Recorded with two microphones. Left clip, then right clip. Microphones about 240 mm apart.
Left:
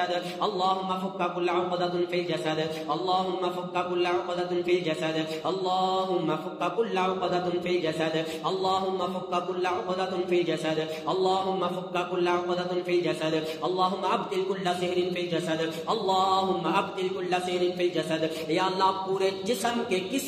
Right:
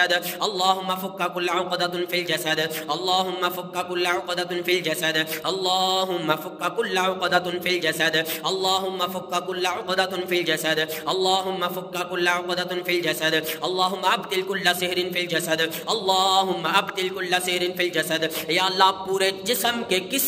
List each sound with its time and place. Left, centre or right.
0.0 s a man's voice: right